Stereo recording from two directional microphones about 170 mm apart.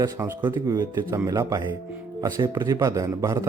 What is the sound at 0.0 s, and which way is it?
Speech, 20° right (ahead or behind).